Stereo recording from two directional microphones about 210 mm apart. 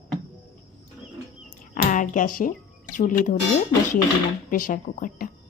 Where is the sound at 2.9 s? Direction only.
40° left (ahead or behind).